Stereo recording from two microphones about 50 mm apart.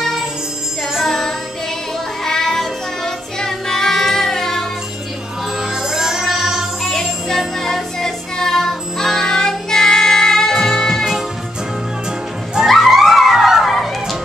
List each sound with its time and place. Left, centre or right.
0.9 s music: centre
5.6 s music: centre
6.8 s music: centre
12.6 s music: centre